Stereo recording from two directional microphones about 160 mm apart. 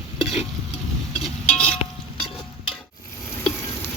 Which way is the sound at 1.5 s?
5° left (ahead or behind).